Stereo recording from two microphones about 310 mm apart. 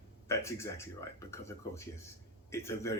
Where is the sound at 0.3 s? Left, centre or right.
Centre.